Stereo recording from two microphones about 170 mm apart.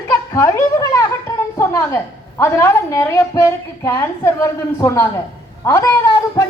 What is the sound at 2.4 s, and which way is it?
A woman's voice, 15° left (ahead or behind).